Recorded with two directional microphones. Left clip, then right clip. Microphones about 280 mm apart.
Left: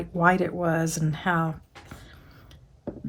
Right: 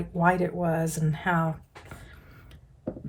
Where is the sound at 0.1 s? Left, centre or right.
Left.